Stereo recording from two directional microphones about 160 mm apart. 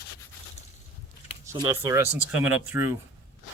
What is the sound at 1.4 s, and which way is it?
Speech, 15° right (ahead or behind).